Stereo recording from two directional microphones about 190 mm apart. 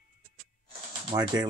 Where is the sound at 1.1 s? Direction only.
25° right (ahead or behind).